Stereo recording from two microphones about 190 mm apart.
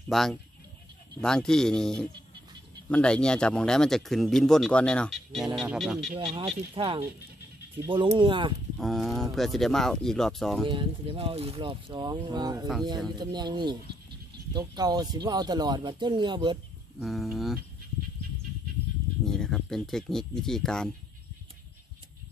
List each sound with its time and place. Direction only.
0.1 s speech: centre (ahead or behind)
6.1 s speech: 30° right (ahead or behind)
8.7 s speech: centre (ahead or behind)
10.7 s speech: 25° right (ahead or behind)
17.0 s speech: centre (ahead or behind)
19.2 s speech: 5° left (ahead or behind)